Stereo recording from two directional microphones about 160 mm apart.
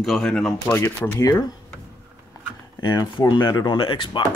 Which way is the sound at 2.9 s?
25° left (ahead or behind).